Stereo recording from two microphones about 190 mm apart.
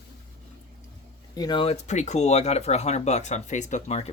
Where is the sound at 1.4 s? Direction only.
25° left (ahead or behind).